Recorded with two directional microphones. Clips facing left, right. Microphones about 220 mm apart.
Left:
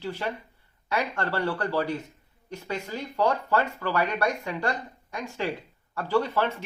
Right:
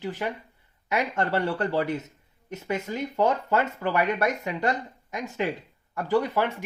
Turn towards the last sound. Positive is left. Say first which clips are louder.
# right 1 dB
turn(degrees=-15)  # may be behind; listen again after turning